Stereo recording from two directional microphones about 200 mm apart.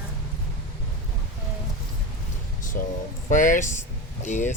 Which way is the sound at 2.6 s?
40° left (ahead or behind).